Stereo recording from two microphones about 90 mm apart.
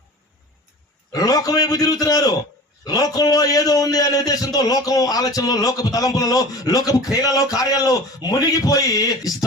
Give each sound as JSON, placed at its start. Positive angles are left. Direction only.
{"t": 1.1, "sound": "a man's voice", "side_deg": 45}